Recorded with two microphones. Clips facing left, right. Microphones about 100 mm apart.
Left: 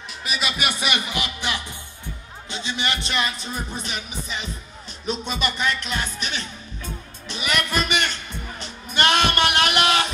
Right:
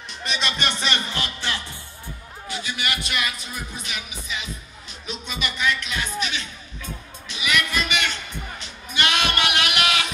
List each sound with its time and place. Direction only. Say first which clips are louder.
0.2 s music: even; 5° left (ahead or behind)
2.4 s speech: left 2 dB; 25° left (ahead or behind)
5.0 s music: left 5 dB; 40° left (ahead or behind)